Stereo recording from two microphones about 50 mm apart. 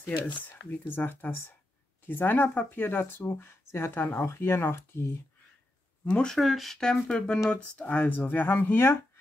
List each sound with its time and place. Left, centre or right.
0.0 s speech: left
4.0 s speech: left
6.0 s speech: centre
6.3 s speech: centre
7.1 s speech: centre; by 8.9 s left